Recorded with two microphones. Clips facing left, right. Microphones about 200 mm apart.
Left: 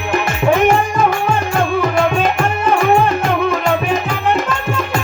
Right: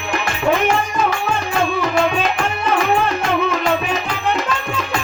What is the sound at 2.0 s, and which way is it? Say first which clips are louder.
Music: left 3 dB; 45° left (ahead or behind).